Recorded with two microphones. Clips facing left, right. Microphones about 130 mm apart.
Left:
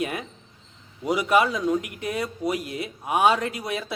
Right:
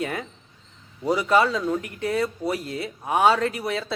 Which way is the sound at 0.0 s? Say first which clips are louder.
Even; 15° left (ahead or behind).